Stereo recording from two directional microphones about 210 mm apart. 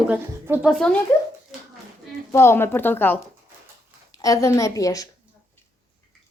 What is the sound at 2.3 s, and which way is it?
A woman's voice, 10° left (ahead or behind).